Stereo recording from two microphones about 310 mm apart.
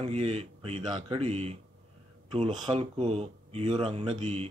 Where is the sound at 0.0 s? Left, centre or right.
Centre.